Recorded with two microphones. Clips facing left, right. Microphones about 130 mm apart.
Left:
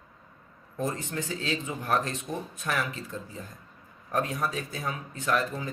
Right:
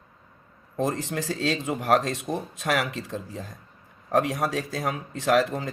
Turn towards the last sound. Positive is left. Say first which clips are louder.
# right 6 dB
turn(degrees=-80)